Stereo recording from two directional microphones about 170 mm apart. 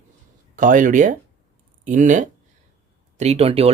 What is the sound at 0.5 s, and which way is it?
Speech, 50° right (ahead or behind).